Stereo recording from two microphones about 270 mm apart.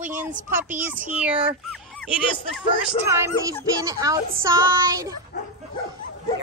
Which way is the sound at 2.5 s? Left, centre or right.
Centre.